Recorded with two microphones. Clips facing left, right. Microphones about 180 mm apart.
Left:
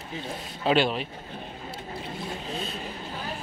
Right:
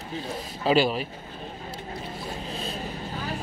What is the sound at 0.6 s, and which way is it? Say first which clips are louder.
Speech: right 1 dB; centre (ahead or behind).